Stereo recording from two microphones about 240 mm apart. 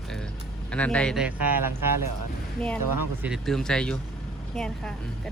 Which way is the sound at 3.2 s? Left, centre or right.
Centre.